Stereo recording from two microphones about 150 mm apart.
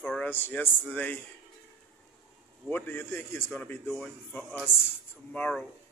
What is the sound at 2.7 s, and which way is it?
Speech, 15° left (ahead or behind).